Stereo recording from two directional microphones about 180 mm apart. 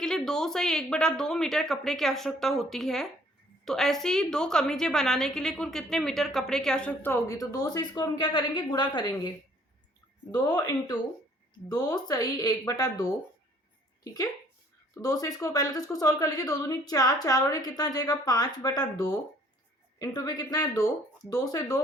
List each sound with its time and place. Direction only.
0.0 s a woman's voice: 5° left (ahead or behind); by 9.3 s 25° left (ahead or behind)
10.3 s a woman's voice: 20° left (ahead or behind)